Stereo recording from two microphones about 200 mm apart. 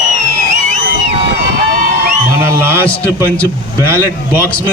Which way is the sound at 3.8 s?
10° right (ahead or behind).